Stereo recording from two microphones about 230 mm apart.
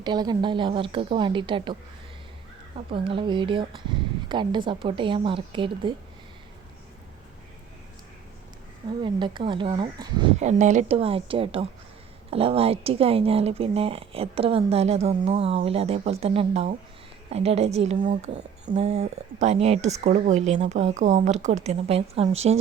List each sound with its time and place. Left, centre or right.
0.0 s speech: centre
2.7 s speech: right
9.0 s speech: right
10.4 s speech: right